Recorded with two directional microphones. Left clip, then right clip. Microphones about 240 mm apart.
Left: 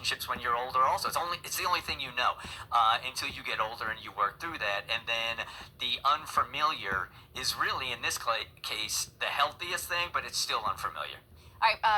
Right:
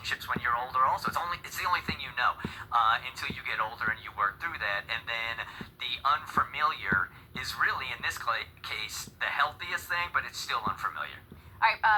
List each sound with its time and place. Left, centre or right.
0.1 s speech: left